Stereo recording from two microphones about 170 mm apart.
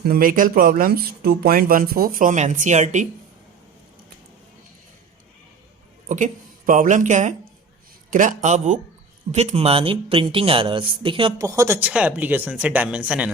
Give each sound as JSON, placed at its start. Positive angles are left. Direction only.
{"t": 0.0, "sound": "speech", "side_deg": -60}
{"t": 6.1, "sound": "a man's voice", "side_deg": -50}
{"t": 11.4, "sound": "speech", "side_deg": -20}